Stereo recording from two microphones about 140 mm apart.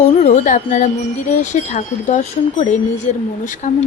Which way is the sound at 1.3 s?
60° left (ahead or behind).